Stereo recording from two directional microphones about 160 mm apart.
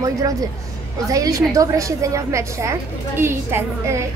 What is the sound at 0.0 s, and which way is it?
A woman's voice, 20° right (ahead or behind).